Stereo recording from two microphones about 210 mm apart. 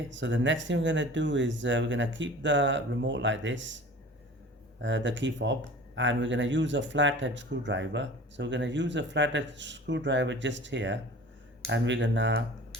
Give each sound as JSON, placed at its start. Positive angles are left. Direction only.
{"t": 0.1, "sound": "speech", "side_deg": -60}